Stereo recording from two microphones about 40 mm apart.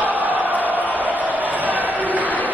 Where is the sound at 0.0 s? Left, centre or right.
Right.